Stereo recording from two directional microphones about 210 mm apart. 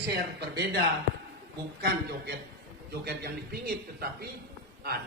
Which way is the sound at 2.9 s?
50° right (ahead or behind).